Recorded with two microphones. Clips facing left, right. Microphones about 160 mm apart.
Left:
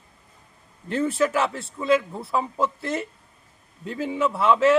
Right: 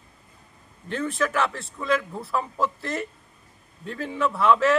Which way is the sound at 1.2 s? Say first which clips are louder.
Even; 25° left (ahead or behind).